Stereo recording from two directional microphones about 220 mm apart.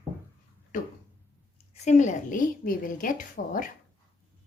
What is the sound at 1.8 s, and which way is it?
A woman's voice, 30° left (ahead or behind).